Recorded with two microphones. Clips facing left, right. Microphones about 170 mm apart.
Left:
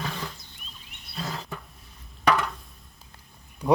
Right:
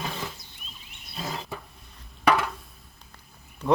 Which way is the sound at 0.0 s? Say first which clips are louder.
Even; 15° right (ahead or behind).